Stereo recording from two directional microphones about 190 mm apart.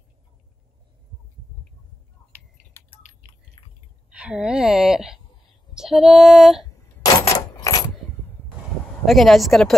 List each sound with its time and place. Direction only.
2.8 s keys jangling: 10° left (ahead or behind)
3.6 s dog: 25° left (ahead or behind)
4.1 s speech: 5° right (ahead or behind)
7.1 s coin: 20° left (ahead or behind)
9.0 s speech: centre (ahead or behind)